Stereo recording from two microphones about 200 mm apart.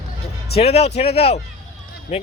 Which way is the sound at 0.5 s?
30° left (ahead or behind).